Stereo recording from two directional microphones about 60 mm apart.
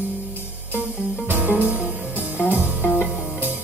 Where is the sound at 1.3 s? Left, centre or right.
Right.